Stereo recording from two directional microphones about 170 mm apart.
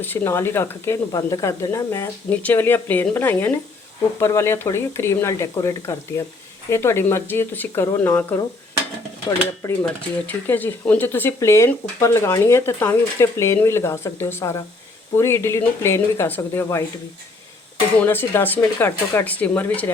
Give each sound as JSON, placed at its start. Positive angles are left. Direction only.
{"t": 0.0, "sound": "speech", "side_deg": 10}
{"t": 9.6, "sound": "speech", "side_deg": 20}
{"t": 10.2, "sound": "speech", "side_deg": 10}
{"t": 18.0, "sound": "speech", "side_deg": 10}